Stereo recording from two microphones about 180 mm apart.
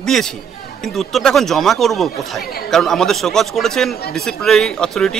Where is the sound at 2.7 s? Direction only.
Centre (ahead or behind).